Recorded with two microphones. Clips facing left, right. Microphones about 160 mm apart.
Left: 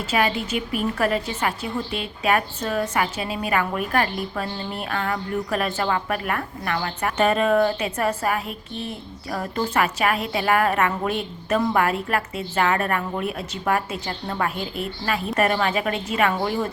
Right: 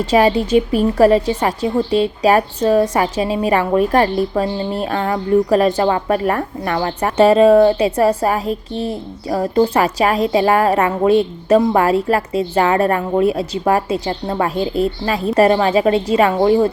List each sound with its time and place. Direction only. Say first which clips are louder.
0.1 s speech: right 10 dB; 35° right (ahead or behind)